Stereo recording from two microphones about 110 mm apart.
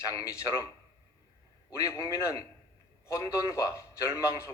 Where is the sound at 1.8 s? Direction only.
30° left (ahead or behind).